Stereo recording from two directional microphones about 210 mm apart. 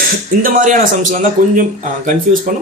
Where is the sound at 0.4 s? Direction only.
40° right (ahead or behind).